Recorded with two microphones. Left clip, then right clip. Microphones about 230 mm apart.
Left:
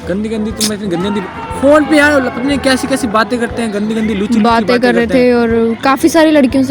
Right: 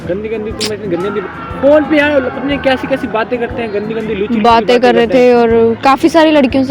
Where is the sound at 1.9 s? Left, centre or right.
Left.